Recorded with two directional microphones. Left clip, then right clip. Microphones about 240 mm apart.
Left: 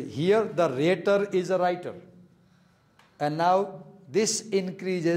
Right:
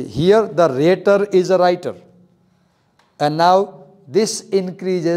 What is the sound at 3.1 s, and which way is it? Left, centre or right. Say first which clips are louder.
A man's voice: right 10 dB; right.